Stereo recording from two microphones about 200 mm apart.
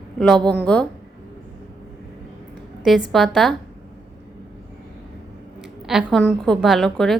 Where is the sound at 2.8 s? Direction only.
Centre (ahead or behind).